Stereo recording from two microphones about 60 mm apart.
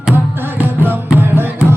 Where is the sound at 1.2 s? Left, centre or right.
Right.